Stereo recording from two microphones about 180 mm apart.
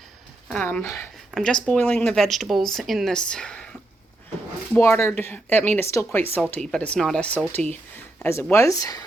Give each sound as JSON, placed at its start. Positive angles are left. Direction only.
{"t": 0.4, "sound": "speech", "side_deg": 5}
{"t": 4.7, "sound": "speech", "side_deg": 15}